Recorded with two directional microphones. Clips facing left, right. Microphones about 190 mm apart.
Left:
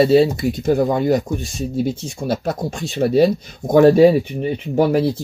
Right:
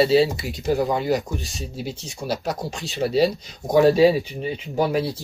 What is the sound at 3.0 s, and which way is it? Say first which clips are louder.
Speech: left 5 dB; 50° left (ahead or behind).